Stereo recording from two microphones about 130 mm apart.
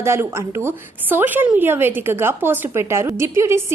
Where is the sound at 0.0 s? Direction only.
20° right (ahead or behind).